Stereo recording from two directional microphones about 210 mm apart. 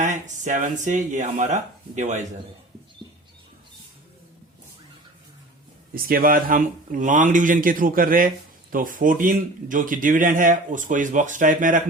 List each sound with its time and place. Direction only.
0.0 s a man's voice: 35° right (ahead or behind)
5.9 s a man's voice: 45° right (ahead or behind)